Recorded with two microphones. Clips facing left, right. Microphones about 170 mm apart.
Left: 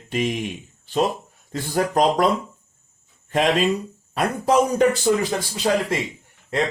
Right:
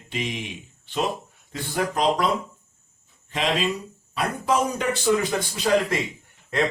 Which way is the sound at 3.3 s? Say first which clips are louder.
Left 5 dB; 50° left (ahead or behind).